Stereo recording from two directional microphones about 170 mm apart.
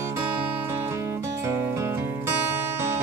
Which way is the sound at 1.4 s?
15° right (ahead or behind).